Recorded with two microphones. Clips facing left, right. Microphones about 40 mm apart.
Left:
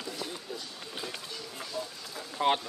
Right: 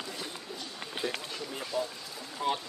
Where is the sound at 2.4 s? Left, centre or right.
Left.